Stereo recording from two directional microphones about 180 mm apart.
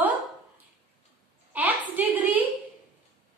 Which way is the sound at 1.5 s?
10° right (ahead or behind).